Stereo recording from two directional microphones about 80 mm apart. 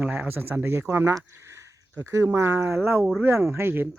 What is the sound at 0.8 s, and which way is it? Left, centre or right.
Speech, right.